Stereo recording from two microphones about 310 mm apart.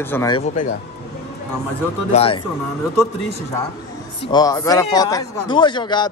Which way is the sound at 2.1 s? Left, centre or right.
Centre.